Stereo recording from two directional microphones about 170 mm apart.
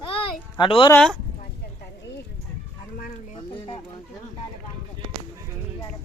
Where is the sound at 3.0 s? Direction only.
55° left (ahead or behind).